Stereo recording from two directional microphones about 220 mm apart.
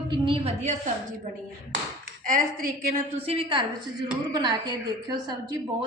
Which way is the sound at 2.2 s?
40° right (ahead or behind).